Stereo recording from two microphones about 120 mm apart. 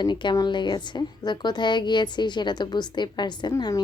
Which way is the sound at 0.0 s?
40° left (ahead or behind).